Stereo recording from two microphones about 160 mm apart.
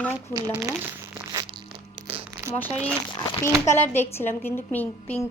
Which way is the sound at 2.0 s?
35° right (ahead or behind).